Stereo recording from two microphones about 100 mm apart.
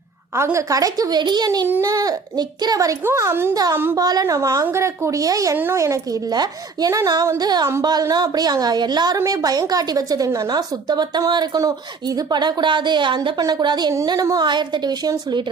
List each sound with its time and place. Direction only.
0.3 s a woman's voice: 30° right (ahead or behind); by 1.5 s 45° right (ahead or behind)
1.8 s a woman's voice: 35° right (ahead or behind)
3.0 s a woman's voice: 25° right (ahead or behind)
3.5 s a woman's voice: 40° right (ahead or behind)
9.1 s a woman's voice: 35° right (ahead or behind)